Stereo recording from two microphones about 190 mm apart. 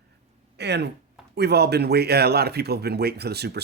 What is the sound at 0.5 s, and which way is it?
Speech, 60° right (ahead or behind).